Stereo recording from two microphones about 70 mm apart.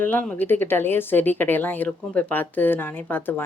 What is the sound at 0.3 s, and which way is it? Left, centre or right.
Speech, left.